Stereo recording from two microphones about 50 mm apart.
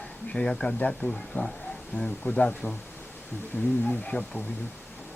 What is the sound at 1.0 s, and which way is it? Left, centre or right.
Speech, left.